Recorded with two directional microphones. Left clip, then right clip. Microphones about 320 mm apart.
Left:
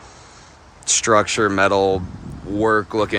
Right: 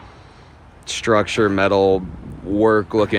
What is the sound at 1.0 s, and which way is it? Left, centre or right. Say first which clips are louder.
Speech: even; centre.